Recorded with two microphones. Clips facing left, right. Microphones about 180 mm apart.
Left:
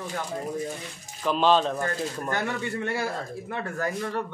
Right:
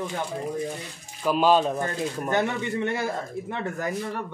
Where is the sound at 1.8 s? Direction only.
20° right (ahead or behind).